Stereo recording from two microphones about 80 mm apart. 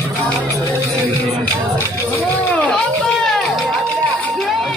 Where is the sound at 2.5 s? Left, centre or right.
Centre.